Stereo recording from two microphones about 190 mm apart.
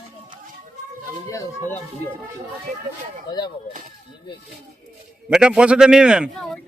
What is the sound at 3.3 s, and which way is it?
Speech, 20° left (ahead or behind).